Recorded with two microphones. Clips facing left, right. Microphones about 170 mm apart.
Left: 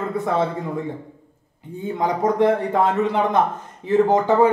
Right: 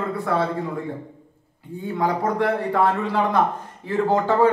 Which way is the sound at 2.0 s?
20° left (ahead or behind).